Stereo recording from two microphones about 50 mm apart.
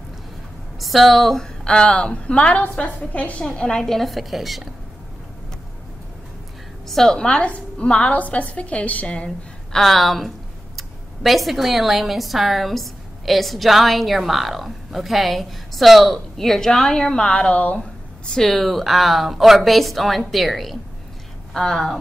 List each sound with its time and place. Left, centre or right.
0.7 s a woman's voice: centre; by 3.4 s left
3.5 s a woman's voice: centre
6.9 s speech: centre
7.2 s a woman's voice: left
9.7 s a woman's voice: centre; by 17.7 s left
17.7 s a sound: centre
18.4 s a woman's voice: centre